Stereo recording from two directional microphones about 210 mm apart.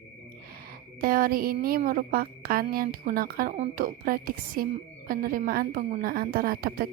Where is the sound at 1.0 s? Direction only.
45° right (ahead or behind).